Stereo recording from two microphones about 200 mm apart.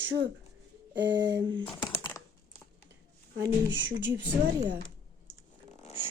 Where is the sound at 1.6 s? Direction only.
25° left (ahead or behind).